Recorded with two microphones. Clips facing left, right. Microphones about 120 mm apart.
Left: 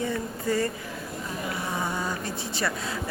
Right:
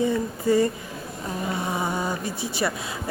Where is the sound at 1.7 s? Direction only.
15° right (ahead or behind).